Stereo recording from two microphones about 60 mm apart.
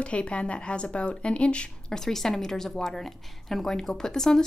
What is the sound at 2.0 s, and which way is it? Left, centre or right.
A woman's voice, centre.